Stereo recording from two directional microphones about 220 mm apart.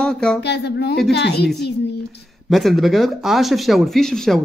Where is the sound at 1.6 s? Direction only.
50° left (ahead or behind).